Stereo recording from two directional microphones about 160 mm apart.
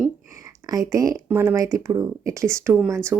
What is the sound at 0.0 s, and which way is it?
A woman's voice, 20° right (ahead or behind).